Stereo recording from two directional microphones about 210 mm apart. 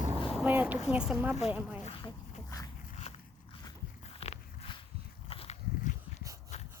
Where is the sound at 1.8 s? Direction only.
20° left (ahead or behind).